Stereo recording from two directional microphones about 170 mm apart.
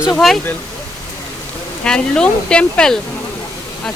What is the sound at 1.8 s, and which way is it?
Speech, 5° left (ahead or behind).